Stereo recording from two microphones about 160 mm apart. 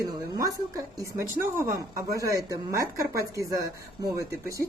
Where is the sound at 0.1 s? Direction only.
20° right (ahead or behind).